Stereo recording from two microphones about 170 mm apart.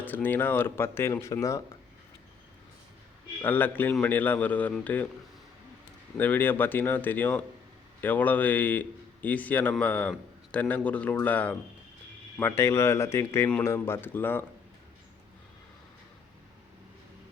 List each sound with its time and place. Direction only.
0.0 s a man's voice: 10° left (ahead or behind)
3.4 s a man's voice: 10° left (ahead or behind)
6.1 s a man's voice: 10° left (ahead or behind)